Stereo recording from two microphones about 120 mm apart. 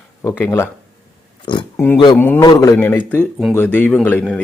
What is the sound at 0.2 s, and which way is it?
Speech, 20° left (ahead or behind).